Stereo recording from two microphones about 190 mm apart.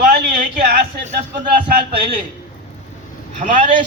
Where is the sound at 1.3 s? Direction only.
25° right (ahead or behind).